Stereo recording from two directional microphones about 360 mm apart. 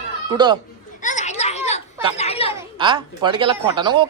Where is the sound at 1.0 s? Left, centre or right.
Centre.